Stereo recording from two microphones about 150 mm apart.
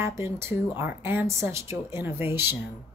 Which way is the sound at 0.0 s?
20° right (ahead or behind).